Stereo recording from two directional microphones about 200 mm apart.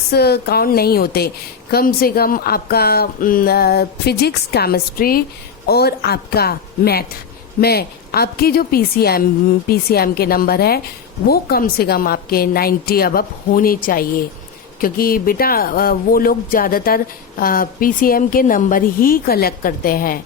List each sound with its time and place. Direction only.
0.1 s speech: 55° left (ahead or behind)